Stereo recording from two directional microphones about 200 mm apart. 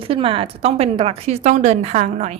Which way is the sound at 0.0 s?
25° right (ahead or behind).